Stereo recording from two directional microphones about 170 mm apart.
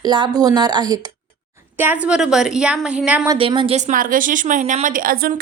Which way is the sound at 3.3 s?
30° right (ahead or behind).